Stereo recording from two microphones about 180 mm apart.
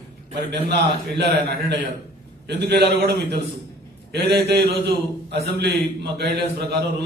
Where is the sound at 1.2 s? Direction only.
70° right (ahead or behind).